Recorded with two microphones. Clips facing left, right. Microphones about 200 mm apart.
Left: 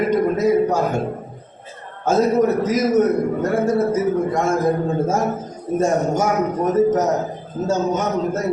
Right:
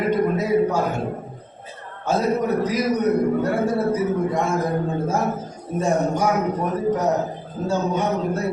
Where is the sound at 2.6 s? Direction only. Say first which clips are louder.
Left 4 dB; 45° left (ahead or behind).